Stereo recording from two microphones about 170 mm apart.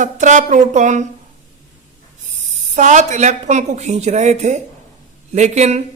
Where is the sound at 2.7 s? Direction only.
45° right (ahead or behind).